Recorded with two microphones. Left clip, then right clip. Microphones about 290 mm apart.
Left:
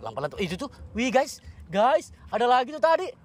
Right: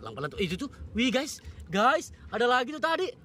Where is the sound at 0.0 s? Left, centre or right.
Centre.